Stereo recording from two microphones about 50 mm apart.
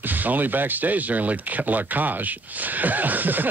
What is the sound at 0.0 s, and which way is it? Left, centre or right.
Speech, right.